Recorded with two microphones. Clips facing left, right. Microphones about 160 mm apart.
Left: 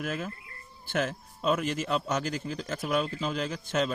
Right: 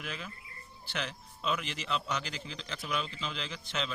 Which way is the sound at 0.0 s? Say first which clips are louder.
Left 9 dB; 45° left (ahead or behind).